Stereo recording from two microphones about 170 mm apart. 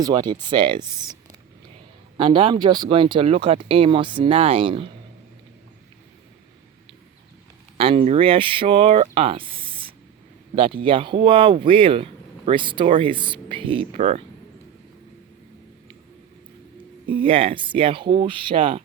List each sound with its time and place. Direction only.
0.0 s speech: 25° right (ahead or behind)
7.8 s speech: 35° right (ahead or behind)
17.1 s speech: 30° right (ahead or behind)